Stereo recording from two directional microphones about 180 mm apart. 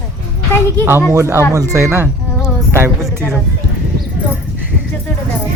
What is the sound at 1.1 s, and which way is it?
Speech, 15° right (ahead or behind).